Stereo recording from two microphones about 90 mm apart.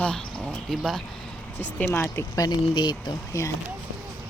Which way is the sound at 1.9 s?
25° left (ahead or behind).